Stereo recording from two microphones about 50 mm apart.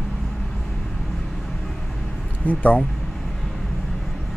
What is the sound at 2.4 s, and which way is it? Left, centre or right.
Speech, left.